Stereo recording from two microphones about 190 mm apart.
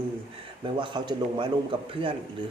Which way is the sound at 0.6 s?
25° right (ahead or behind).